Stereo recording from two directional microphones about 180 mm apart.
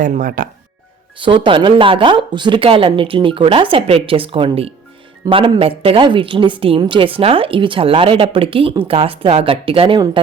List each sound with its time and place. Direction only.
0.0 s speech: 50° right (ahead or behind)
1.2 s speech: 30° right (ahead or behind)